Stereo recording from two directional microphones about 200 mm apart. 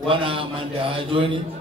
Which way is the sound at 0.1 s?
25° right (ahead or behind).